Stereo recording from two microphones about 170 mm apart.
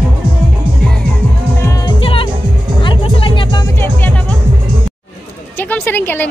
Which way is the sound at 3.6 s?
15° left (ahead or behind).